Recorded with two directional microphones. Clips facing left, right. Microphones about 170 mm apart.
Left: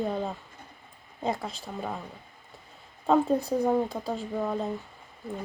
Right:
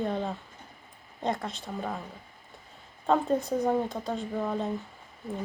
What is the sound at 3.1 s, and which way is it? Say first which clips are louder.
Speech: left 2 dB; centre (ahead or behind).